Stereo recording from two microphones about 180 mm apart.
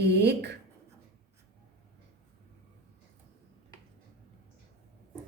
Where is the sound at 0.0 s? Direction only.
70° right (ahead or behind).